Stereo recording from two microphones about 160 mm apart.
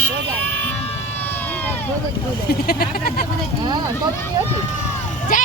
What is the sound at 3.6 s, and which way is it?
Speech, 25° right (ahead or behind).